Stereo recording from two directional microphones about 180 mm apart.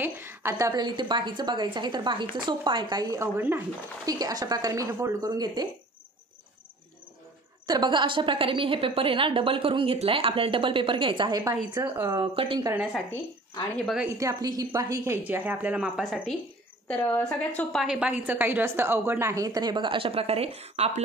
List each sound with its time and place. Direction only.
0.0 s a woman's voice: 10° right (ahead or behind)
7.6 s a woman's voice: 25° right (ahead or behind)
12.4 s a woman's voice: 30° right (ahead or behind)
12.7 s a woman's voice: 5° right (ahead or behind)
14.0 s a woman's voice: 15° right (ahead or behind)
16.8 s a woman's voice: 10° left (ahead or behind)
17.8 s a woman's voice: 5° right (ahead or behind); by 21.0 s 35° right (ahead or behind)